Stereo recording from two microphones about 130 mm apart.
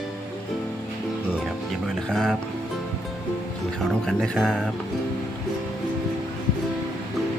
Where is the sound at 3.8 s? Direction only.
5° left (ahead or behind).